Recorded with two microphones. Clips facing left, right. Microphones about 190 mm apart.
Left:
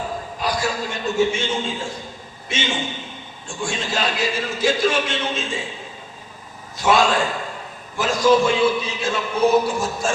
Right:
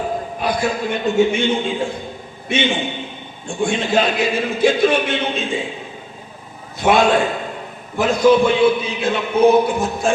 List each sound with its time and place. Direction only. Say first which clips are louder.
0.3 s a man's voice: right 2 dB; 55° right (ahead or behind)
6.7 s a man's voice: right 3 dB; 60° right (ahead or behind)